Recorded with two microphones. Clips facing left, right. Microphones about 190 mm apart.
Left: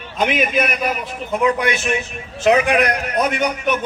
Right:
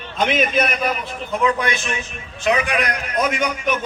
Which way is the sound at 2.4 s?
45° left (ahead or behind).